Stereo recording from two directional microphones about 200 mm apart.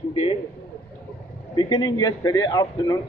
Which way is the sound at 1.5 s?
20° left (ahead or behind).